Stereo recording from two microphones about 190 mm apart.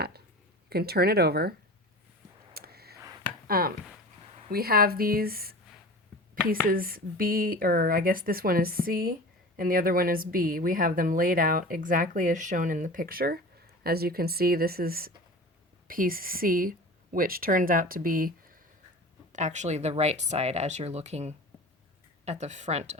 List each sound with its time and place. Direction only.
0.7 s speech: 55° right (ahead or behind)
2.5 s a sound: 55° right (ahead or behind)
4.4 s speech: 50° right (ahead or behind)